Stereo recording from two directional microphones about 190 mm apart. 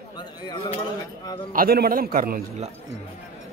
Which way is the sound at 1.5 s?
50° right (ahead or behind).